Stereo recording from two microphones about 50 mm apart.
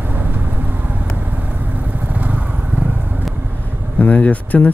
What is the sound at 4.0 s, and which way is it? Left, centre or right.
Speech, left.